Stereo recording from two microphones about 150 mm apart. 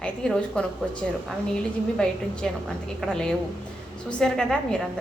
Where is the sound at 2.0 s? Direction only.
5° left (ahead or behind).